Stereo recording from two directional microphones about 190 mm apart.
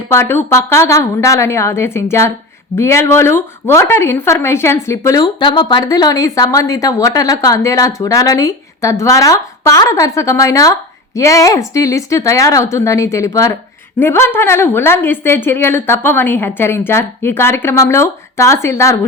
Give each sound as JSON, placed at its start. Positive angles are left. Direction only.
{"t": 0.1, "sound": "speech", "side_deg": 10}